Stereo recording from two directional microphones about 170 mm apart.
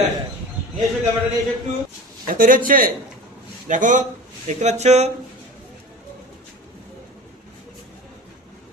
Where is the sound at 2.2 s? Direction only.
55° right (ahead or behind); by 5.1 s 40° right (ahead or behind).